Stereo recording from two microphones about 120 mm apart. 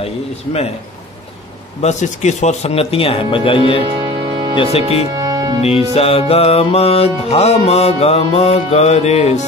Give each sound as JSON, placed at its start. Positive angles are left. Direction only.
{"t": 0.0, "sound": "music", "side_deg": 55}
{"t": 1.8, "sound": "speech", "side_deg": 75}
{"t": 4.0, "sound": "music", "side_deg": -40}
{"t": 4.6, "sound": "music", "side_deg": 55}
{"t": 5.2, "sound": "music", "side_deg": -30}
{"t": 5.6, "sound": "music", "side_deg": 55}